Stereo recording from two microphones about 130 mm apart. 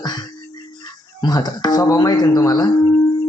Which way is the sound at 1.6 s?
25° left (ahead or behind).